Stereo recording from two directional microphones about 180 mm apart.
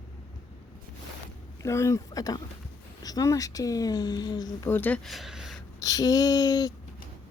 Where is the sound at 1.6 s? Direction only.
15° left (ahead or behind).